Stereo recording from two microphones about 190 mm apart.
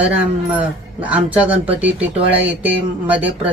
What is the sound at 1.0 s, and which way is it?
Speech, 10° right (ahead or behind).